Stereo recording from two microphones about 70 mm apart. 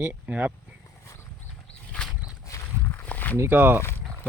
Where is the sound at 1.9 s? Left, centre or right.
Centre.